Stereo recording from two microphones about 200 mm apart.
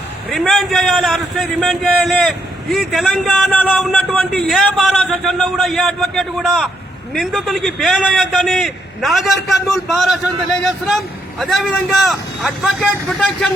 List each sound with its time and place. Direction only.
0.3 s a man's voice: centre (ahead or behind)